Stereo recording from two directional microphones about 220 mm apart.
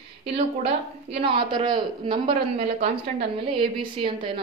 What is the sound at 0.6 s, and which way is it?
A woman's voice, 25° right (ahead or behind).